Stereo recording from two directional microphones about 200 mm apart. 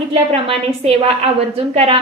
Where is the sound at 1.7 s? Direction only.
30° right (ahead or behind).